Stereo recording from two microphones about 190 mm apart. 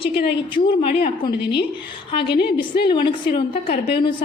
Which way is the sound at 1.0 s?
25° left (ahead or behind).